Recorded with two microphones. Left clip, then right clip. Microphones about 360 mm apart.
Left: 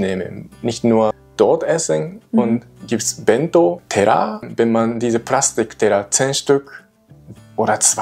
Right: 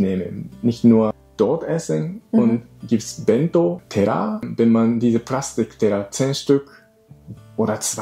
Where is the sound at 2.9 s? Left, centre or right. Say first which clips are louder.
Left 3 dB; left.